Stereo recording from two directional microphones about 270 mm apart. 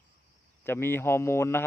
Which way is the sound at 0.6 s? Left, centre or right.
Centre.